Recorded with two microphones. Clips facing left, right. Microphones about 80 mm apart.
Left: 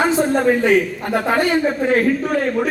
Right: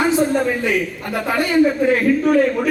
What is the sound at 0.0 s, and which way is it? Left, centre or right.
A man's voice, left.